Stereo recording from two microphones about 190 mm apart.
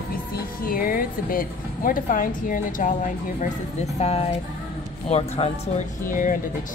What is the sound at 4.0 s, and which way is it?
Speech, 30° left (ahead or behind).